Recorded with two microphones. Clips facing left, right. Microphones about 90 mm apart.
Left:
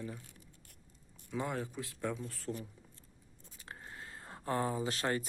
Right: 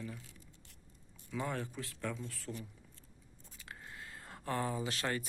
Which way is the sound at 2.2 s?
35° left (ahead or behind).